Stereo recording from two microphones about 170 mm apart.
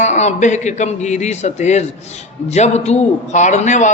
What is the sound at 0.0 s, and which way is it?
A man's voice, 40° left (ahead or behind).